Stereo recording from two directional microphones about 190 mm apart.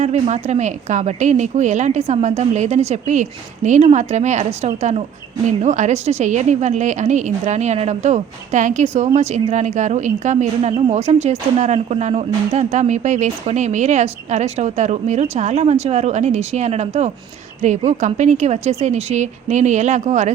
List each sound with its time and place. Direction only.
0.0 s a woman's voice: 35° right (ahead or behind)